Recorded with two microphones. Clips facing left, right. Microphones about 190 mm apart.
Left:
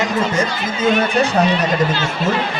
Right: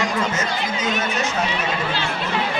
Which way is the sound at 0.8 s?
55° left (ahead or behind).